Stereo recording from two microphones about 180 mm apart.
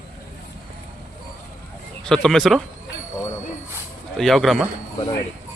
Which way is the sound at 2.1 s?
5° left (ahead or behind).